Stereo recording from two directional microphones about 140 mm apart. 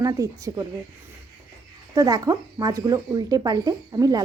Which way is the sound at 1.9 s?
25° right (ahead or behind).